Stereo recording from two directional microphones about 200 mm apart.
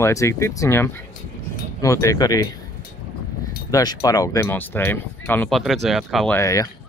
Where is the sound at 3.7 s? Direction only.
20° left (ahead or behind); by 6.3 s centre (ahead or behind).